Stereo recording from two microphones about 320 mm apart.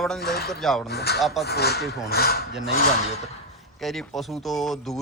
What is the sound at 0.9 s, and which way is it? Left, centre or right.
Speech, left.